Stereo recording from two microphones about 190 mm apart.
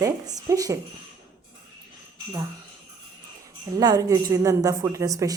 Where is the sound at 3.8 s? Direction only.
20° right (ahead or behind).